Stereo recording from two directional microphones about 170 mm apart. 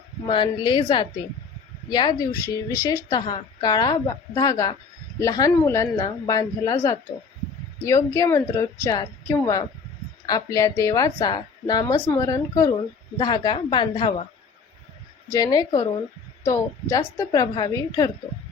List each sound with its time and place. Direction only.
0.3 s a woman's voice: 30° left (ahead or behind)
15.3 s a woman's voice: 20° left (ahead or behind)